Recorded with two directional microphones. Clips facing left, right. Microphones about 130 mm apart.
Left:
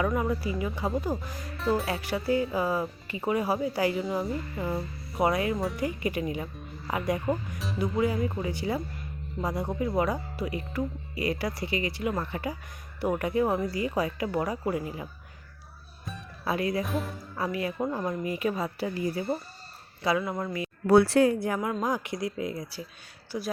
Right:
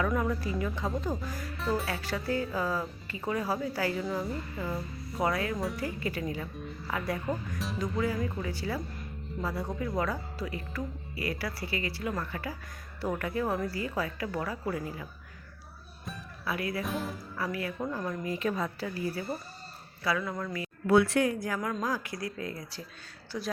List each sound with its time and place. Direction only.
0.0 s speech: 15° left (ahead or behind)
16.5 s speech: 25° left (ahead or behind)
16.8 s speech: centre (ahead or behind)
17.3 s speech: 20° left (ahead or behind)
18.8 s speech: 15° left (ahead or behind)
20.8 s speech: 35° left (ahead or behind); by 22.9 s 15° left (ahead or behind)
23.3 s speech: 25° left (ahead or behind)